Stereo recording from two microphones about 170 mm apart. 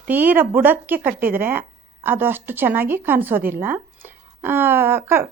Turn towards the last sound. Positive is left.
turn(degrees=-15)  # may be behind; listen again after turning